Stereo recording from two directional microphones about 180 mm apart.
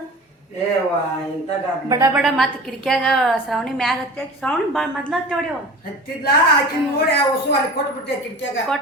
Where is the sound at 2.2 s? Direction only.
Centre (ahead or behind).